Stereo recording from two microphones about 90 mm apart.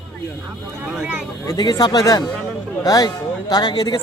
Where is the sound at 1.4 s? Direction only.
50° left (ahead or behind).